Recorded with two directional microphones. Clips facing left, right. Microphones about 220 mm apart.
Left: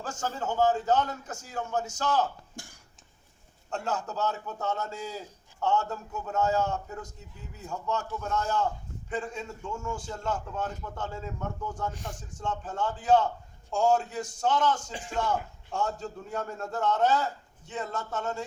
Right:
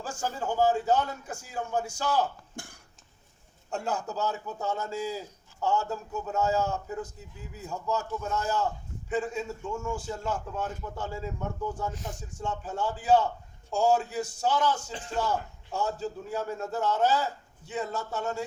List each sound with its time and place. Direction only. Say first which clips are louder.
0.0 s a man's voice: even; 10° right (ahead or behind)
2.6 s a sound: right 3 dB; 55° right (ahead or behind)
3.7 s a man's voice: right 1 dB; 10° right (ahead or behind)